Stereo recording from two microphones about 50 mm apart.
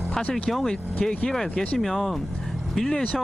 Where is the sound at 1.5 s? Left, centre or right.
Left.